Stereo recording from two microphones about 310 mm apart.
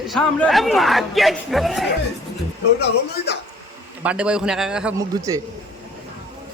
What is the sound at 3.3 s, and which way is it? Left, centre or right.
Speech, left.